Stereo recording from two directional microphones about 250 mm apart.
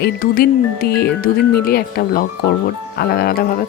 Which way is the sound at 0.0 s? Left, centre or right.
Left.